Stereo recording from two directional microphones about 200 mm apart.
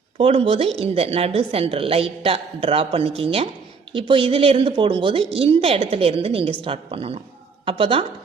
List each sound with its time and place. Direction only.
0.2 s a woman's voice: 25° right (ahead or behind)